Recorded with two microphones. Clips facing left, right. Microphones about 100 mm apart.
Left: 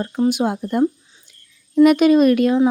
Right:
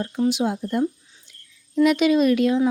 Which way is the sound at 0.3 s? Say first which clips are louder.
Left 2 dB; 55° left (ahead or behind).